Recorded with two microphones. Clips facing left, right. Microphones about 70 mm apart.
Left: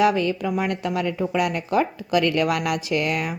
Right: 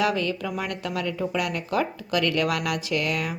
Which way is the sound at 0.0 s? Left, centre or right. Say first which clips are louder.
Left 5 dB; left.